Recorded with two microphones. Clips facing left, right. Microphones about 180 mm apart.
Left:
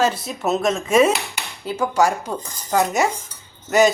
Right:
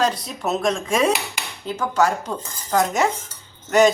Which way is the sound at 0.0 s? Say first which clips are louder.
Left 2 dB; 5° left (ahead or behind).